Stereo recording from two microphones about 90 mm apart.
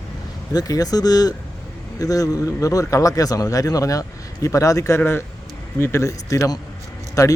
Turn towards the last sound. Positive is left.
turn(degrees=40)  # may be behind; listen again after turning